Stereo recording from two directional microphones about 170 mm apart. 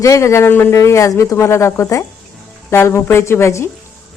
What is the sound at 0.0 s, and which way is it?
Speech, 15° left (ahead or behind).